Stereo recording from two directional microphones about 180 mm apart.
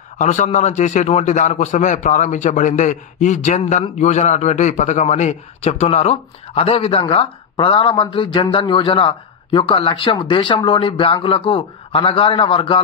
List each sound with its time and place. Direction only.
0.2 s a man's voice: 40° left (ahead or behind)